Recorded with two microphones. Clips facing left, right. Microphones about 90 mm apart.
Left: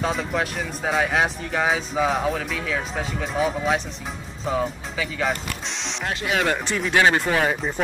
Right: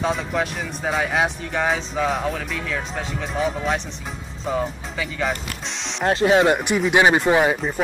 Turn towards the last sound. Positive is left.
turn(degrees=-15)  # may be behind; listen again after turning